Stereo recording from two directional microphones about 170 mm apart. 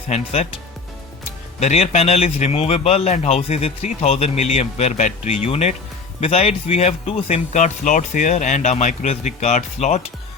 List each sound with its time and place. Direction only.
1.5 s a man's voice: 40° left (ahead or behind)
7.5 s speech: 45° left (ahead or behind)